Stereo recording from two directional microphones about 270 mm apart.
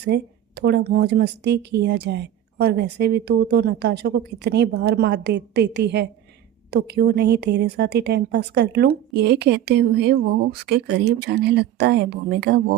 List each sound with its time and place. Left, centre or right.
0.0 s speech: right